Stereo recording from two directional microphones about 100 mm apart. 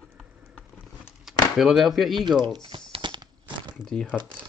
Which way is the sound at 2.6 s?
55° right (ahead or behind).